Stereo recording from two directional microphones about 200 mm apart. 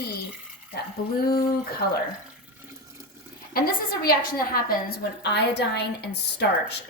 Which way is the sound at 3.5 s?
45° left (ahead or behind).